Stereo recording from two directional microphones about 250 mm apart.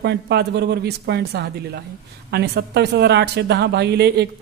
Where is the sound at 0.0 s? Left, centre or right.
Right.